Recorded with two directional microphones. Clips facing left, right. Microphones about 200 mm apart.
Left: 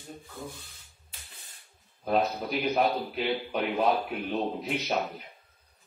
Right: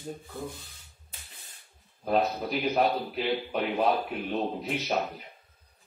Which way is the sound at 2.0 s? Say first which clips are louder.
Right 1 dB; centre (ahead or behind).